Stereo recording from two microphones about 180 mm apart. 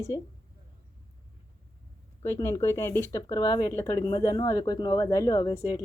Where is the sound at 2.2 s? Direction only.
15° left (ahead or behind).